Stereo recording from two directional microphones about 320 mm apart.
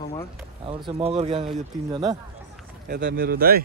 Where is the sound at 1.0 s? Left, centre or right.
Centre.